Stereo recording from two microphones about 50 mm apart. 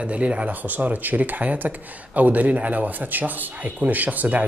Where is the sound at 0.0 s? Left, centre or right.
Right.